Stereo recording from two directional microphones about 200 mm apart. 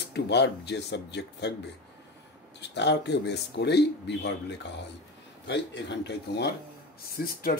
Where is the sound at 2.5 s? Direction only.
60° left (ahead or behind).